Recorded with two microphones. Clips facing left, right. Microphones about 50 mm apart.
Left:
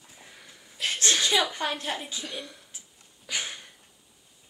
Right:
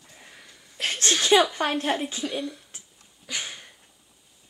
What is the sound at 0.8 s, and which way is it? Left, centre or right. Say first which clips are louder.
Speech: right 1 dB; right.